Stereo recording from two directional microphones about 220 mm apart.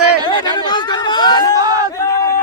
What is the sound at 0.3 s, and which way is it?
Chatter, 20° left (ahead or behind).